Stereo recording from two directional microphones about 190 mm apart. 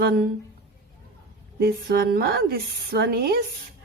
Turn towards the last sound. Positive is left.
turn(degrees=-55)  # may be behind; listen again after turning